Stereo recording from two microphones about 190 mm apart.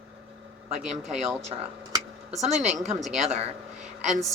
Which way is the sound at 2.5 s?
35° right (ahead or behind).